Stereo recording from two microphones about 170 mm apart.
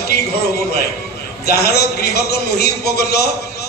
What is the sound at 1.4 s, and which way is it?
A man's voice, 70° left (ahead or behind).